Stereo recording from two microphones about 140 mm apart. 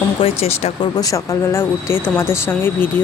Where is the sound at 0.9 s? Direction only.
25° left (ahead or behind).